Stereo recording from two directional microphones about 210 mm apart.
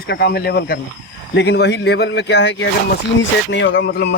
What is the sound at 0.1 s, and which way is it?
A man's voice, 50° left (ahead or behind).